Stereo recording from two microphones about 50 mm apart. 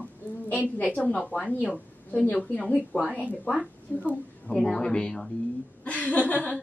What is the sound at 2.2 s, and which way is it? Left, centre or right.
Speech, left.